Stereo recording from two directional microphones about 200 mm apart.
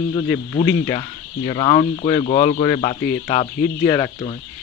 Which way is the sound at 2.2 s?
35° left (ahead or behind).